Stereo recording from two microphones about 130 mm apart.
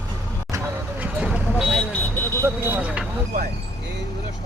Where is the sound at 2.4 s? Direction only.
15° right (ahead or behind).